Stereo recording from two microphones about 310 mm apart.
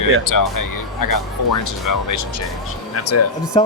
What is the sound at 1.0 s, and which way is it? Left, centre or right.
Speech, left.